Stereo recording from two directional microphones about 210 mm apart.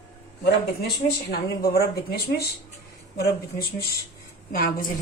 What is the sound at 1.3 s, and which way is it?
A woman's voice, 50° left (ahead or behind).